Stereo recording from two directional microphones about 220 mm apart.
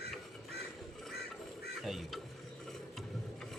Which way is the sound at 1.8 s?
Centre (ahead or behind).